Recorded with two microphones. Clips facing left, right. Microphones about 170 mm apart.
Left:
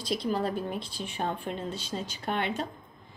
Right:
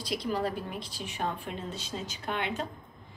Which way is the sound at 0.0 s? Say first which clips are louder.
Left 2 dB; 25° left (ahead or behind).